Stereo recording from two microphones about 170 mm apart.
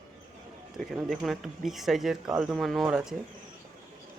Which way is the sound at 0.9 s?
Centre (ahead or behind).